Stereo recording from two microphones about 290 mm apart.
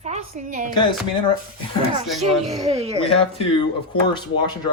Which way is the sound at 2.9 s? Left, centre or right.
Centre.